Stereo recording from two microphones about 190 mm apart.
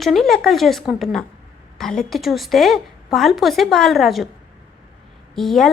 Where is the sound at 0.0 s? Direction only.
Centre (ahead or behind).